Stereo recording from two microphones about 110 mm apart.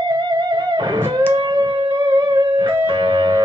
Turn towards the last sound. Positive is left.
turn(degrees=-40)  # may be behind; listen again after turning